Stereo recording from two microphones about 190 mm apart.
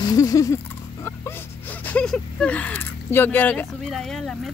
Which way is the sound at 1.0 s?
10° left (ahead or behind).